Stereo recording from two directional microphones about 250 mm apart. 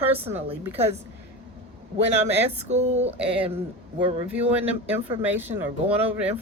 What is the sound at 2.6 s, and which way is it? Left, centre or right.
Speech, right.